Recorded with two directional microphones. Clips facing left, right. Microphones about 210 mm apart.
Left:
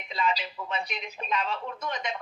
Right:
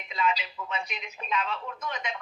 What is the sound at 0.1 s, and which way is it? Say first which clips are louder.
Speech: even; 35° left (ahead or behind).